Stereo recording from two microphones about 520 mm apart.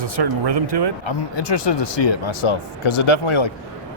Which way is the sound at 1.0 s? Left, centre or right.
Left.